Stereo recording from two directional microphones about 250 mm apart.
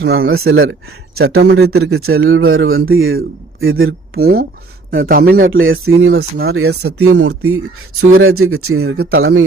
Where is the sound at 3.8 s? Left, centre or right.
Right.